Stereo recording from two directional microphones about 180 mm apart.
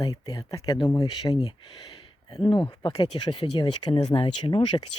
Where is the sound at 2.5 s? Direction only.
25° left (ahead or behind).